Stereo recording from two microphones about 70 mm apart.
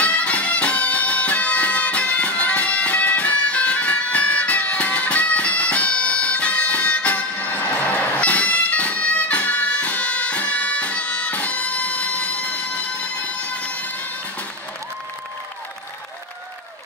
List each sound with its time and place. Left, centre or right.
0.0 s music: centre